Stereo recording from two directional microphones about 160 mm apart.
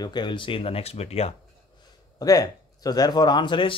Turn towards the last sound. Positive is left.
turn(degrees=30)  # may be behind; listen again after turning